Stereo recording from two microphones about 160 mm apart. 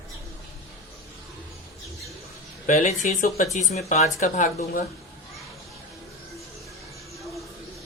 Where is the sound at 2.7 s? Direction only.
50° left (ahead or behind).